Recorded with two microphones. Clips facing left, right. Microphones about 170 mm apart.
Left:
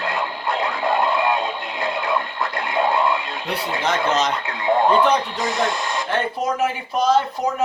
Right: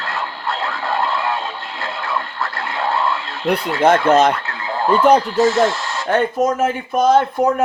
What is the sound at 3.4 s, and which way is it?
Speech, 55° right (ahead or behind).